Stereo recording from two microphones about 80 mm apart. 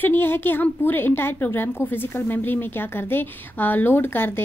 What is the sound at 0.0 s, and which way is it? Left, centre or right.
A woman's voice, left.